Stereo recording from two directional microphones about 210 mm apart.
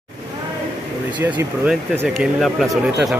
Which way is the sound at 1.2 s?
10° right (ahead or behind).